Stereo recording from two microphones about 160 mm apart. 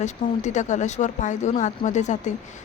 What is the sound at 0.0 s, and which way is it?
Speech, 50° left (ahead or behind).